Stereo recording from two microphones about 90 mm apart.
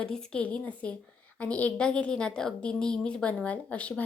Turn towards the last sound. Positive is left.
turn(degrees=15)  # may be behind; listen again after turning